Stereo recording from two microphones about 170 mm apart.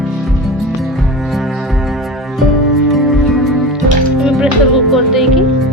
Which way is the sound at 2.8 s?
Centre (ahead or behind).